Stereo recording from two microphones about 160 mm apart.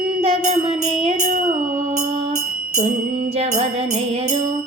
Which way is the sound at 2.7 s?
40° right (ahead or behind).